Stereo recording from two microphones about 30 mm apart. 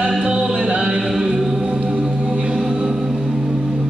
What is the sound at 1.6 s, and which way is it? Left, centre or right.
Music, right.